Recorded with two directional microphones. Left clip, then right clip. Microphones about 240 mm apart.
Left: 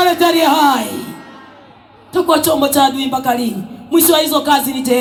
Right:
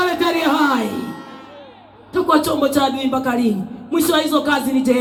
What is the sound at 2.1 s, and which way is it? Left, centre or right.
Speech, left.